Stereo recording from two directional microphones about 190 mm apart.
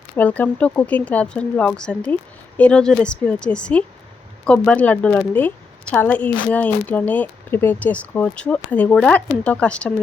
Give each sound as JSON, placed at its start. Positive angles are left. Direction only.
{"t": 0.2, "sound": "a woman's voice", "side_deg": 5}